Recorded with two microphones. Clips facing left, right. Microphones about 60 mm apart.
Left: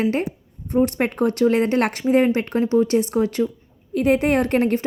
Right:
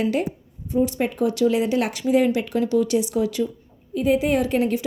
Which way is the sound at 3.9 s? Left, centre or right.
Left.